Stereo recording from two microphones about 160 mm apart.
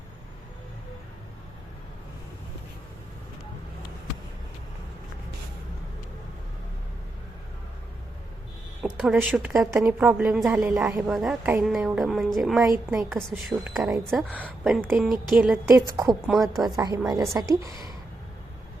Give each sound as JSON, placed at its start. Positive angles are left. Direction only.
{"t": 8.8, "sound": "a woman's voice", "side_deg": 0}
{"t": 14.8, "sound": "a woman's voice", "side_deg": -5}
{"t": 15.7, "sound": "speech", "side_deg": -20}
{"t": 16.2, "sound": "a woman's voice", "side_deg": 0}
{"t": 16.7, "sound": "speech", "side_deg": -20}